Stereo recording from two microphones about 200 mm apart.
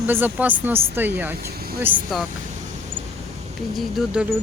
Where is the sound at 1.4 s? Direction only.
50° right (ahead or behind).